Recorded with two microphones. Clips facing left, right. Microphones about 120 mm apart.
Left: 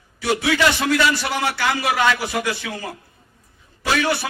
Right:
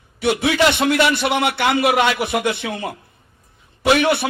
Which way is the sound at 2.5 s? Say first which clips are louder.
Right 3 dB; 60° right (ahead or behind).